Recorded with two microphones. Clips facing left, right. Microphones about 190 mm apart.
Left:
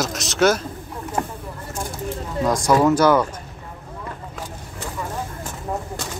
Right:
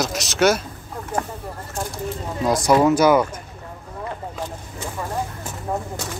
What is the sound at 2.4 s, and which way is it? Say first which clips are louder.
Speech: right 1 dB; 10° right (ahead or behind).